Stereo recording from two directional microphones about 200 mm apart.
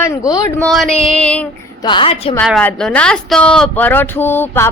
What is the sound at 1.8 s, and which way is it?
Speech, 25° left (ahead or behind).